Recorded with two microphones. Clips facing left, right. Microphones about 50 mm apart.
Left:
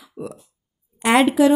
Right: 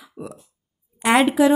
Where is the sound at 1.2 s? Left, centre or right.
Centre.